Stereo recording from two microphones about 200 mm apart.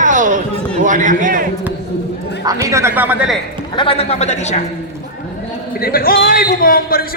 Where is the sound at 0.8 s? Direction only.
40° right (ahead or behind).